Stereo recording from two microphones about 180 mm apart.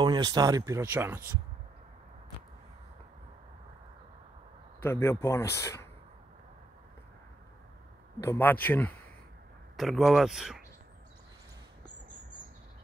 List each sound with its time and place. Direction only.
0.0 s speech: 20° right (ahead or behind)
4.8 s speech: 15° left (ahead or behind)
8.2 s speech: 15° left (ahead or behind)
9.8 s speech: centre (ahead or behind)